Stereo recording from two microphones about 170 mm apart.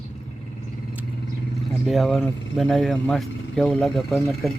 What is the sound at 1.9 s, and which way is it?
Speech, centre (ahead or behind).